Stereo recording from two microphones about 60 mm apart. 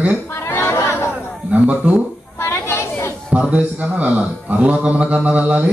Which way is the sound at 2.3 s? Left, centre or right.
Left.